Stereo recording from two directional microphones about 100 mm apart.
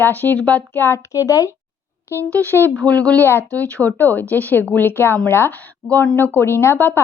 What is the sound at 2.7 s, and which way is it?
Speech, 10° left (ahead or behind).